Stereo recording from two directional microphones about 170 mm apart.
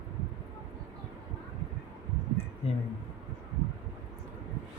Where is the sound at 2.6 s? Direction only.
35° left (ahead or behind).